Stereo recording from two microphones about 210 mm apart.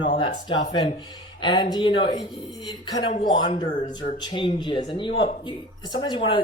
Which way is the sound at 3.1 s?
35° left (ahead or behind).